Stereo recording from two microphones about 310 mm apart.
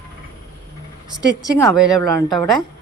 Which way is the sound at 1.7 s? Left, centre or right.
Centre.